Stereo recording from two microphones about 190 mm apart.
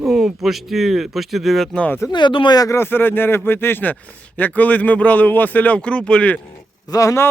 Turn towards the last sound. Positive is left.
turn(degrees=15)  # may be behind; listen again after turning